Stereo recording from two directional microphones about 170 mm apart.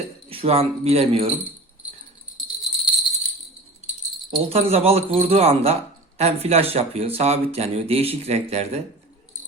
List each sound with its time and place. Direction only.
0.3 s speech: 35° right (ahead or behind)
2.4 s jingle bell: 5° right (ahead or behind)
4.4 s speech: 35° right (ahead or behind)